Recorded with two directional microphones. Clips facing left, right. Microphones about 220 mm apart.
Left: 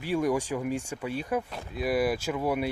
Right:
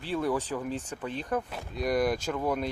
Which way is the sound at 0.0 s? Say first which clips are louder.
Left 3 dB; 15° left (ahead or behind).